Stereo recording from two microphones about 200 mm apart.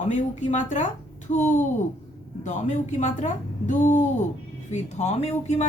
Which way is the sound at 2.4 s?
35° left (ahead or behind).